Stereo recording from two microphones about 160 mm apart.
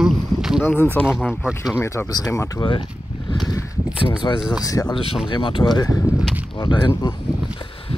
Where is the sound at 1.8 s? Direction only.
15° left (ahead or behind).